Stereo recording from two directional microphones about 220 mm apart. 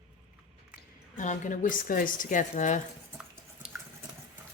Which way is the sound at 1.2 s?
35° left (ahead or behind).